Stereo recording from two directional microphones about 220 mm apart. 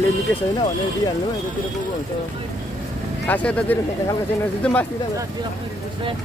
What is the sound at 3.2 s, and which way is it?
Speech, 5° left (ahead or behind).